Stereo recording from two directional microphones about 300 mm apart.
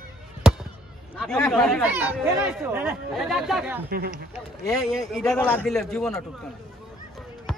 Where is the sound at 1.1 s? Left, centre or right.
Centre.